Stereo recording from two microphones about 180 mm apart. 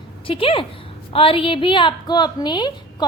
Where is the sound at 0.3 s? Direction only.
30° left (ahead or behind).